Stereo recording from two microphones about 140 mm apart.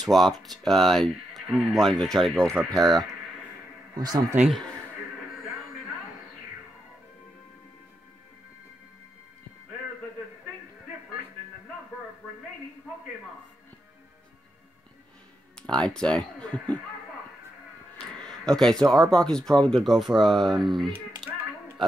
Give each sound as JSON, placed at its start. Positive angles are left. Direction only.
{"t": 0.0, "sound": "speech", "side_deg": 0}
{"t": 3.9, "sound": "speech", "side_deg": -25}
{"t": 15.5, "sound": "speech", "side_deg": 5}
{"t": 18.2, "sound": "speech", "side_deg": 5}